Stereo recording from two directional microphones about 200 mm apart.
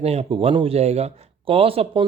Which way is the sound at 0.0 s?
30° right (ahead or behind).